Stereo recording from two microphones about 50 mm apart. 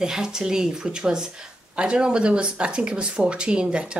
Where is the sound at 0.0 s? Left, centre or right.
Centre.